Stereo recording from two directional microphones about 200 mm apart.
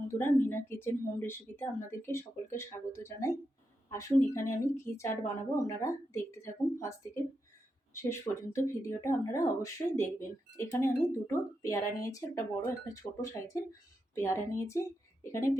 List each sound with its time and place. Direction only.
0.1 s speech: 10° left (ahead or behind)